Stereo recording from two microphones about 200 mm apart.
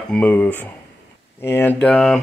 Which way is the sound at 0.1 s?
5° left (ahead or behind).